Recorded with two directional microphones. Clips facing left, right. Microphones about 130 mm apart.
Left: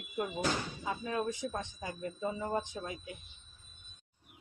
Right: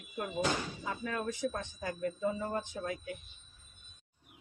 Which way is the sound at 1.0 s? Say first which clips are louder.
Right 1 dB; 20° left (ahead or behind).